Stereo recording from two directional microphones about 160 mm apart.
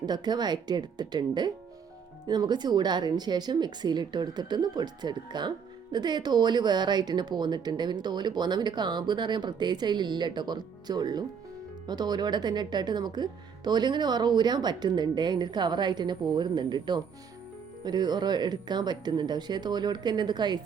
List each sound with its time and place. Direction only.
0.0 s speech: 25° right (ahead or behind)